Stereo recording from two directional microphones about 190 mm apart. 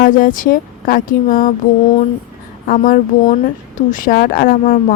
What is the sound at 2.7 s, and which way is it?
A woman's voice, 45° left (ahead or behind).